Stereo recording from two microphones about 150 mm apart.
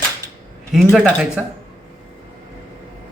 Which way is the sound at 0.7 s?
5° right (ahead or behind).